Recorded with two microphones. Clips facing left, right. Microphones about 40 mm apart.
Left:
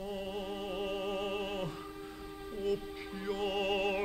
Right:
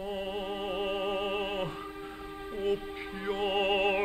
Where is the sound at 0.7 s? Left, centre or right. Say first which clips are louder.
Right 5 dB; right.